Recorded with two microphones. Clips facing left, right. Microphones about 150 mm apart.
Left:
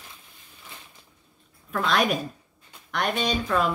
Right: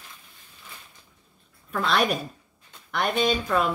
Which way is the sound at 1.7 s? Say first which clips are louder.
Even; centre (ahead or behind).